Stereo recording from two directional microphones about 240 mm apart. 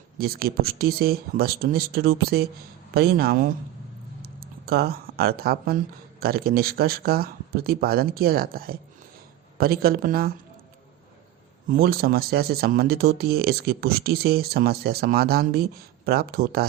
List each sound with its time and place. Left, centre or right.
0.2 s speech: right
4.2 s a sound: right
6.1 s speech: right
11.7 s speech: right